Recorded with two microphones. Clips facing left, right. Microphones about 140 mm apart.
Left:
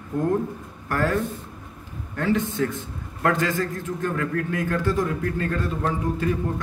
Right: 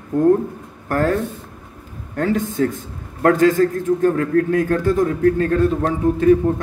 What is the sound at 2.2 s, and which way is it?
A man's voice, 40° right (ahead or behind).